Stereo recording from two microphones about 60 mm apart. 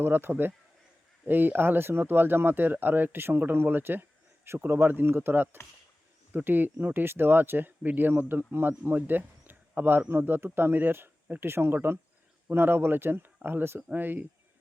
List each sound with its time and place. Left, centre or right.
0.0 s speech: right